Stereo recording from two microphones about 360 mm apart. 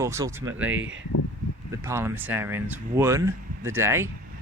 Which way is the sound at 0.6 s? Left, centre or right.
Right.